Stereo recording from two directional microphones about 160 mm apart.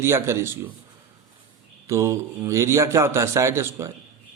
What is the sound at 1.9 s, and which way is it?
A man's voice, 20° right (ahead or behind).